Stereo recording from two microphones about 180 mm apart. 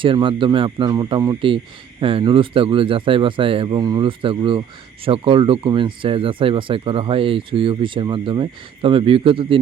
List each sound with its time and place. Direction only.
0.0 s speech: 30° right (ahead or behind)